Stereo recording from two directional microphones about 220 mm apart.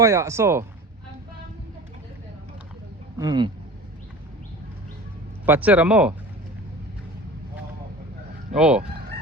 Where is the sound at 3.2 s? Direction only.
20° right (ahead or behind).